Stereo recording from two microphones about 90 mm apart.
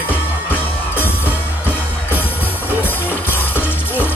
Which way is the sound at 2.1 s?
20° left (ahead or behind).